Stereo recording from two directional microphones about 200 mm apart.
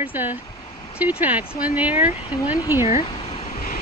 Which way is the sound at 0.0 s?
10° right (ahead or behind).